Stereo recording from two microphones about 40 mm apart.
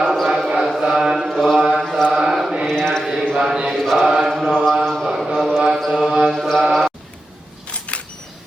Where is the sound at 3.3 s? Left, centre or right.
Centre.